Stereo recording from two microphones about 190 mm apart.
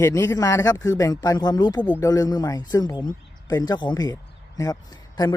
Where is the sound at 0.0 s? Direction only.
15° left (ahead or behind).